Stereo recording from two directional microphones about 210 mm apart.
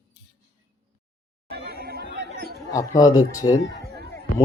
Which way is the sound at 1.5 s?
50° right (ahead or behind).